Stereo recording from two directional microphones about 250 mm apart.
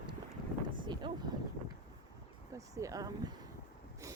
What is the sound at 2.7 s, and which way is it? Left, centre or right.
Speech, centre.